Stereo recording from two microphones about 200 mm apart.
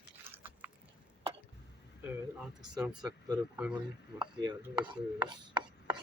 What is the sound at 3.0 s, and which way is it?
Speech, 20° right (ahead or behind).